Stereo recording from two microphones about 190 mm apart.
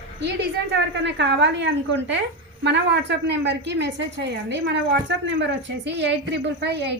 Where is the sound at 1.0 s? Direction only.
65° right (ahead or behind).